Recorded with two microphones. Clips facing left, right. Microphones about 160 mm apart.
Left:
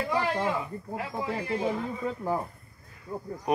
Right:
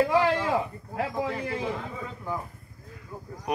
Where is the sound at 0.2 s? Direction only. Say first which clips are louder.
Right 4 dB; 90° right.